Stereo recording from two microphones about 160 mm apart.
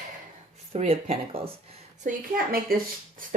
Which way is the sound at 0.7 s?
40° right (ahead or behind).